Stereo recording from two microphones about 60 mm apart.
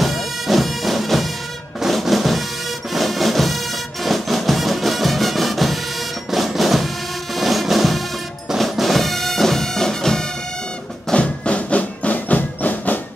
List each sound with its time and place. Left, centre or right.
0.0 s bagpipes: centre
1.8 s music: centre
8.5 s bagpipes: centre
11.1 s music: centre